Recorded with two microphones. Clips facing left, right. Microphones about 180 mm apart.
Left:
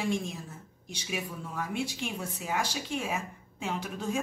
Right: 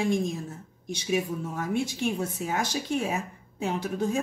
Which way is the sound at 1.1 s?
45° right (ahead or behind).